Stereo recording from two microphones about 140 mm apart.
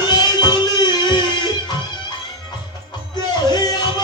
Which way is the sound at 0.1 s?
30° left (ahead or behind).